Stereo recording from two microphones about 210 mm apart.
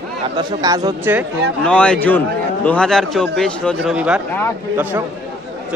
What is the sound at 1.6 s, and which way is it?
A man's voice, 5° left (ahead or behind).